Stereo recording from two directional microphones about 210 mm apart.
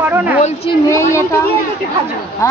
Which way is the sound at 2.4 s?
15° left (ahead or behind).